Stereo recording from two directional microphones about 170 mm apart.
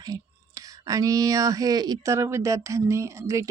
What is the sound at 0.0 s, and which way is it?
Speech, 20° right (ahead or behind).